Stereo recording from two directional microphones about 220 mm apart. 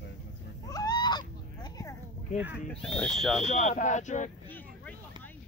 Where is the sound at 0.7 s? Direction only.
15° left (ahead or behind).